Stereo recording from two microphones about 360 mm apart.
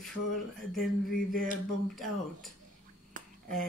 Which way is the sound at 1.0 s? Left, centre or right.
Left.